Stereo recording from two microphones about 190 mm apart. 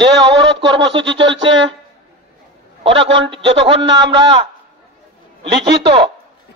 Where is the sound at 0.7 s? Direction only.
25° right (ahead or behind).